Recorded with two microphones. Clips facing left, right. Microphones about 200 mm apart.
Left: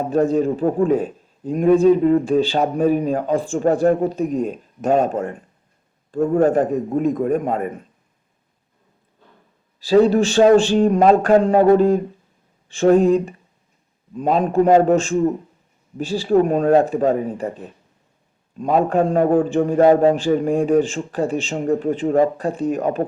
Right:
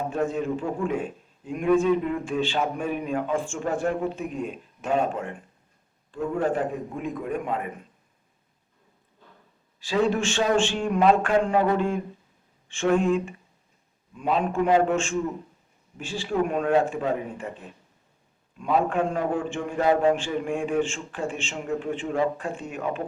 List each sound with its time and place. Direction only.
0.1 s a man's voice: 35° left (ahead or behind)
9.8 s speech: 35° left (ahead or behind)
18.5 s speech: 40° left (ahead or behind)